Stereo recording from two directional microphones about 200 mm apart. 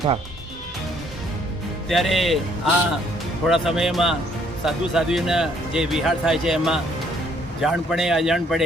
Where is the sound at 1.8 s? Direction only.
Centre (ahead or behind).